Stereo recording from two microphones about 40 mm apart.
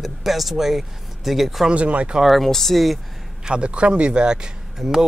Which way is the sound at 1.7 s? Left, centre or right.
Right.